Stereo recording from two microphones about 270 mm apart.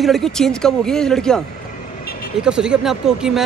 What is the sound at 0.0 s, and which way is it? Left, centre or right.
Speech, centre.